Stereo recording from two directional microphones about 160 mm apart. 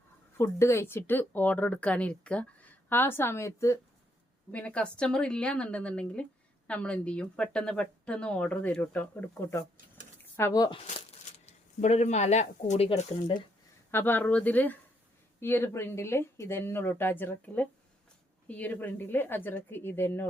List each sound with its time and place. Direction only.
0.3 s speech: 15° left (ahead or behind)
4.5 s speech: 5° left (ahead or behind); by 10.8 s 25° left (ahead or behind)
11.4 s speech: 45° left (ahead or behind)
13.9 s speech: 10° left (ahead or behind)